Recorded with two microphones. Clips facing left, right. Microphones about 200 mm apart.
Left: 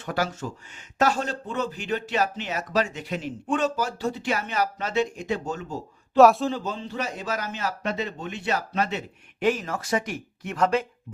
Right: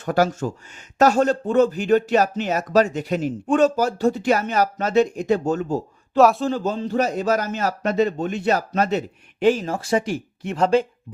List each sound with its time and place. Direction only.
0.0 s speech: 45° right (ahead or behind)
6.1 s speech: centre (ahead or behind)
6.5 s a man's voice: 45° right (ahead or behind)